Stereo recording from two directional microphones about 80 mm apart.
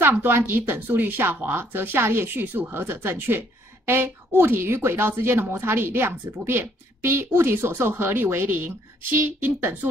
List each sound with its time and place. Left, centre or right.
0.0 s a woman's voice: right